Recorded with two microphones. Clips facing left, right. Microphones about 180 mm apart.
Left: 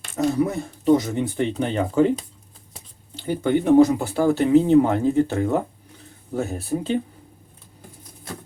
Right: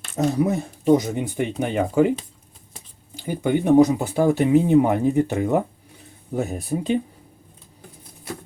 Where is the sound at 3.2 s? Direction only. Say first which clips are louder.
Left 1 dB; 15° right (ahead or behind).